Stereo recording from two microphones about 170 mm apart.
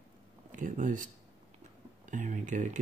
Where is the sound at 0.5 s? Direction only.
50° right (ahead or behind).